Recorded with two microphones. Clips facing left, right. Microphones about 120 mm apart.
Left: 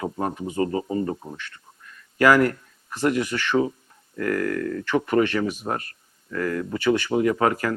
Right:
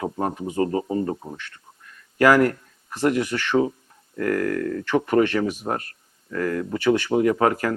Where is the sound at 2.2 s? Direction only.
40° right (ahead or behind).